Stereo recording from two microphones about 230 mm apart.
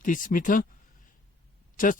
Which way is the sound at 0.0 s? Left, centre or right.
Left.